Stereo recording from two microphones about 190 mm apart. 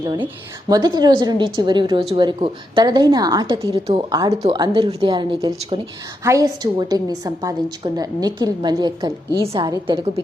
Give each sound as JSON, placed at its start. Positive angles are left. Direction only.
{"t": 0.0, "sound": "a woman's voice", "side_deg": -20}